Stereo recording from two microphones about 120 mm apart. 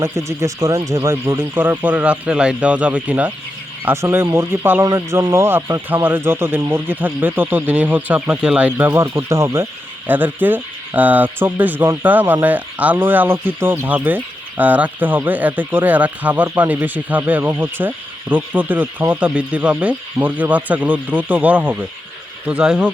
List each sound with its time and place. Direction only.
0.0 s speech: 25° right (ahead or behind)
4.9 s speech: 30° right (ahead or behind); by 22.9 s 15° right (ahead or behind)